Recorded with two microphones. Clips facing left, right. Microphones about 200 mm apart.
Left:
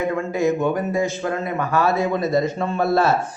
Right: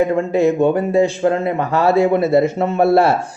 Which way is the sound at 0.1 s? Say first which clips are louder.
Right 5 dB; 30° right (ahead or behind).